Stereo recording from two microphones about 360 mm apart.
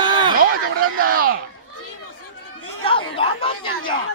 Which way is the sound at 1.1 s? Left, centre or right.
Right.